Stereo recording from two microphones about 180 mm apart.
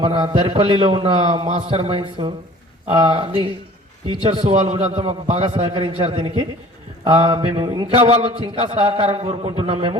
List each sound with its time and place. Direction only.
0.0 s a man's voice: 30° right (ahead or behind)